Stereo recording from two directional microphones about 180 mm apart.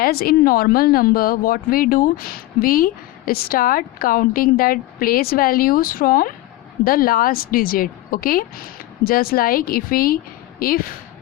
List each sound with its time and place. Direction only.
0.0 s speech: 55° left (ahead or behind)